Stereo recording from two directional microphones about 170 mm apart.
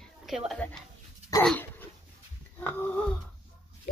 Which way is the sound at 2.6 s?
10° left (ahead or behind).